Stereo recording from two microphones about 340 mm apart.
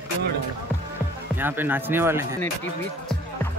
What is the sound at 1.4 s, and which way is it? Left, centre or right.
Speech, centre.